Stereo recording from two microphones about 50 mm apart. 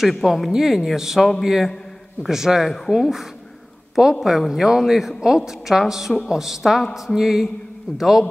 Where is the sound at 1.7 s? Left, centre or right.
Centre.